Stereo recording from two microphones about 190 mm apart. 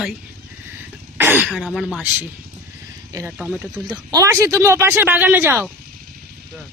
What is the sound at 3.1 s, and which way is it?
Speech, 15° right (ahead or behind).